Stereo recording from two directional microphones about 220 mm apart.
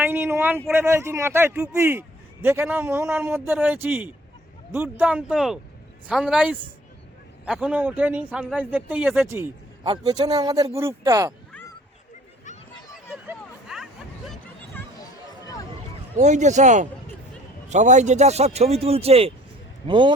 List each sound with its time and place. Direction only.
0.0 s a man's voice: 10° right (ahead or behind)
12.9 s a sound: 5° right (ahead or behind)
16.1 s a man's voice: 30° right (ahead or behind)